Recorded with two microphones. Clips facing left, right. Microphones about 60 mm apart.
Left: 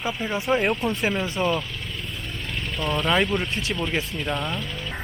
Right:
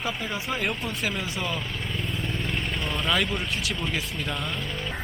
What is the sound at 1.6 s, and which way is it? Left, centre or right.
Vehicle, centre.